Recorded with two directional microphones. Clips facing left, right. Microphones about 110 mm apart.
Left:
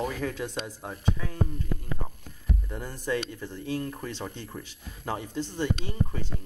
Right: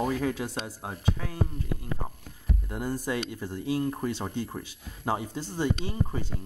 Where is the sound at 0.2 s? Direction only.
15° right (ahead or behind).